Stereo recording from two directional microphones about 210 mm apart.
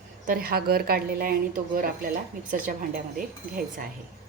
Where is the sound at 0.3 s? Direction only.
45° right (ahead or behind).